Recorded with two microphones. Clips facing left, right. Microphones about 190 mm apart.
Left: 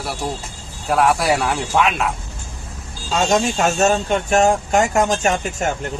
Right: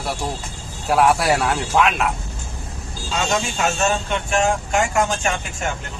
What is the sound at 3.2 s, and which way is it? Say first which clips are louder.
Speech: left 5 dB; 40° left (ahead or behind).